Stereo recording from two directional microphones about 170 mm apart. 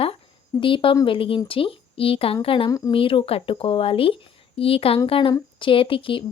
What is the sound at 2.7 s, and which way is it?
Speech, 20° left (ahead or behind).